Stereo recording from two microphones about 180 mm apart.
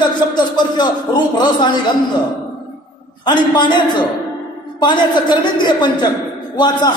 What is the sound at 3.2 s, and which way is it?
Speech, 25° left (ahead or behind).